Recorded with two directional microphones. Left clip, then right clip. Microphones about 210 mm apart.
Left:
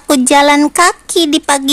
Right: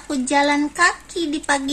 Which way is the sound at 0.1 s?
55° left (ahead or behind).